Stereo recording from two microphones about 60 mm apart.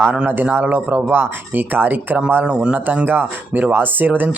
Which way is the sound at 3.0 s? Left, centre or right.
Right.